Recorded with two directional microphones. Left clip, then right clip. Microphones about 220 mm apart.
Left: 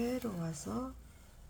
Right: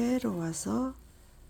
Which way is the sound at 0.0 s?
50° right (ahead or behind).